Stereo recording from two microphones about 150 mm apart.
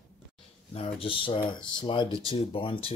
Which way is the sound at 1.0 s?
35° left (ahead or behind).